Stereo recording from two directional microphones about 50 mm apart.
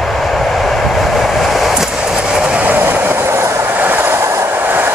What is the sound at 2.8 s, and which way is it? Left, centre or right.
Train, right.